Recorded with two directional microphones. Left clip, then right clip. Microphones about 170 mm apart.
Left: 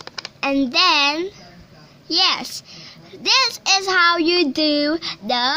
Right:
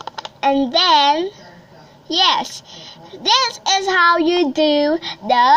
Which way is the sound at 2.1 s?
30° left (ahead or behind).